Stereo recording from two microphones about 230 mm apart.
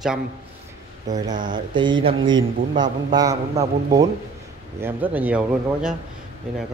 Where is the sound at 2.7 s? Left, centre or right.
Centre.